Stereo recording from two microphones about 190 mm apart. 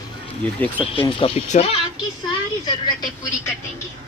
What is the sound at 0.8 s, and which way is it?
Speech, 30° left (ahead or behind).